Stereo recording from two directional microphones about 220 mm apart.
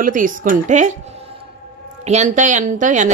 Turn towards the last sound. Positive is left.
turn(degrees=-35)  # may be behind; listen again after turning